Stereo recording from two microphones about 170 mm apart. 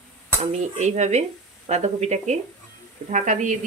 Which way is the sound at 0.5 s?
40° right (ahead or behind).